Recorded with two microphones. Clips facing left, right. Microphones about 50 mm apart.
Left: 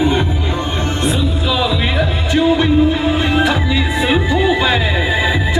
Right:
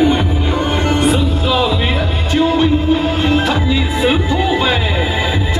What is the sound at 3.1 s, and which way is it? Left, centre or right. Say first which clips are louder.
Music: even; centre.